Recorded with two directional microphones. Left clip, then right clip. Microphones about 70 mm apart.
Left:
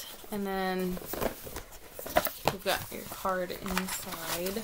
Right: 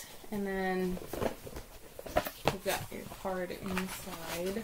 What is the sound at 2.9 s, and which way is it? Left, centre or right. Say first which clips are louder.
Speech: left 3 dB; left.